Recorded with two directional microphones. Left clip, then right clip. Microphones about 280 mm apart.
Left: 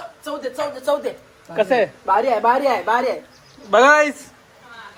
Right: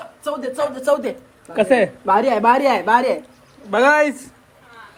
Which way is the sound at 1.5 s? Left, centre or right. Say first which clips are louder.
Right 2 dB; right.